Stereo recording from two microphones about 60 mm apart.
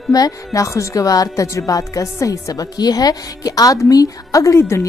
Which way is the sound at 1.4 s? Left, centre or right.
Left.